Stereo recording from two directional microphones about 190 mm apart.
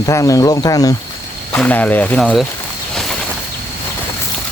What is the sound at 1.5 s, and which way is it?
Speech, 10° left (ahead or behind).